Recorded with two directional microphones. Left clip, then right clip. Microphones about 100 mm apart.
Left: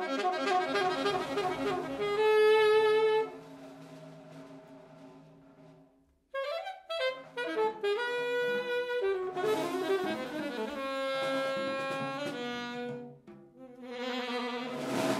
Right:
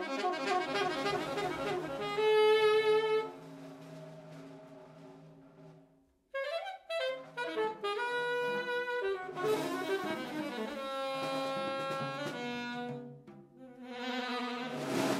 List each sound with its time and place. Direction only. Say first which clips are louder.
0.0 s saxophone: left 3 dB; 25° left (ahead or behind)
6.3 s saxophone: left 2 dB; 30° left (ahead or behind)
9.8 s music: left 4 dB; 30° left (ahead or behind)
13.8 s insect: left 2 dB; 30° left (ahead or behind)